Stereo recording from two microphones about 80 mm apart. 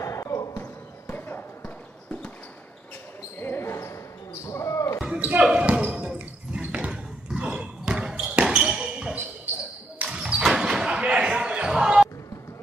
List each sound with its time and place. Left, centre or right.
0.0 s basketball bounce: left; by 2.3 s centre
3.3 s basketball bounce: left
5.0 s basketball bounce: centre